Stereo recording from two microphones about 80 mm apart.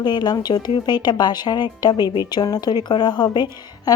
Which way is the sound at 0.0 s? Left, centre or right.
Left.